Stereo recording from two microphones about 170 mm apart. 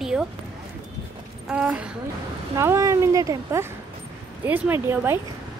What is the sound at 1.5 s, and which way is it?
Speech, 5° right (ahead or behind).